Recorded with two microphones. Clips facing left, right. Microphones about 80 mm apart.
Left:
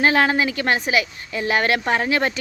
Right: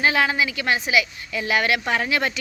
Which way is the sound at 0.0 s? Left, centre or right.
Left.